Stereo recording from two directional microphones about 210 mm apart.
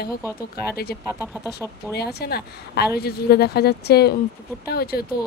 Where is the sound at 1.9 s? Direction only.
50° left (ahead or behind).